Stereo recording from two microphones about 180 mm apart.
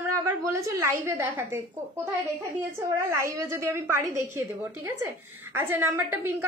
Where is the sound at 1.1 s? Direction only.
15° right (ahead or behind).